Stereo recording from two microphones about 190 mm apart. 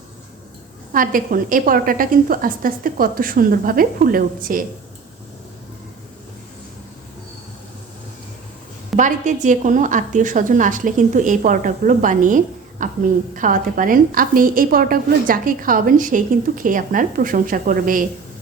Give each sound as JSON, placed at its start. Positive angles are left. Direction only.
{"t": 0.9, "sound": "a woman's voice", "side_deg": -45}
{"t": 9.0, "sound": "a woman's voice", "side_deg": -40}